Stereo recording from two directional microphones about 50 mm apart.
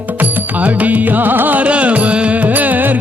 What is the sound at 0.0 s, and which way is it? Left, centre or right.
Music, right.